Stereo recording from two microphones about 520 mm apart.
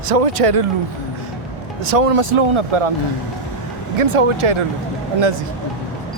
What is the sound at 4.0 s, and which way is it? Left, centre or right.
Speech, right.